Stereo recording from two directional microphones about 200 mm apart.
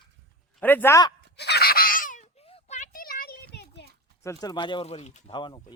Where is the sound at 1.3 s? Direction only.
55° left (ahead or behind).